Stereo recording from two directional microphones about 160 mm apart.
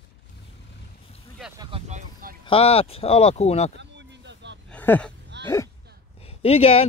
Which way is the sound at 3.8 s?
90° right.